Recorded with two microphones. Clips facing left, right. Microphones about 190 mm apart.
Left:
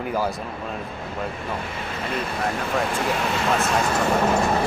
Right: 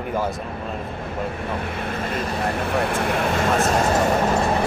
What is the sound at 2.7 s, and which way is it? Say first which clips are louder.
Speech: right 1 dB; 60° right (ahead or behind).